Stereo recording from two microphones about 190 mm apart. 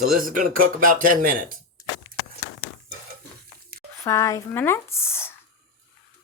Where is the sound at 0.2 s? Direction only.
45° right (ahead or behind).